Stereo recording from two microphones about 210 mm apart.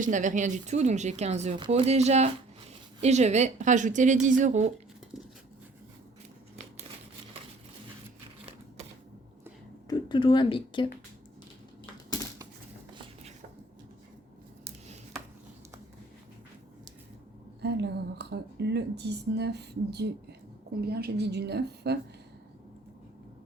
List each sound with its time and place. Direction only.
0.0 s speech: 35° right (ahead or behind)
9.8 s speech: 20° left (ahead or behind)
12.9 s shuffle: 25° right (ahead or behind)
17.6 s speech: 50° right (ahead or behind)